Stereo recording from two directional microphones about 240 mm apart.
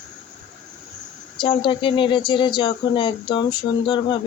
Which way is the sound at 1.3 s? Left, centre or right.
Left.